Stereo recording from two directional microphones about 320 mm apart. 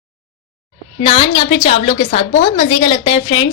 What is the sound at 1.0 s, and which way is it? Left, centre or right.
A woman's voice, centre.